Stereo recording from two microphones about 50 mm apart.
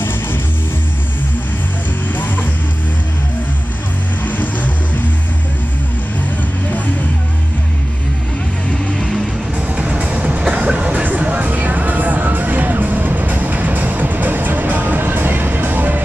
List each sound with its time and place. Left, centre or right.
4.2 s music: left
8.9 s music: centre
9.8 s music: right